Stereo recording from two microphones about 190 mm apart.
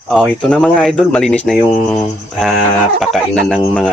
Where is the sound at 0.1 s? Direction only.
Centre (ahead or behind).